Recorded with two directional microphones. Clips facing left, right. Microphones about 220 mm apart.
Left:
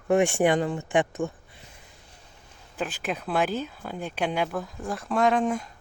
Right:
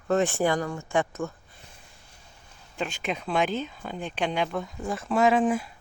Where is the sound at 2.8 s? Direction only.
5° left (ahead or behind).